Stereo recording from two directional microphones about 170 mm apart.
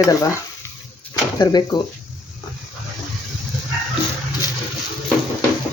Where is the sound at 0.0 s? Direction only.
20° left (ahead or behind).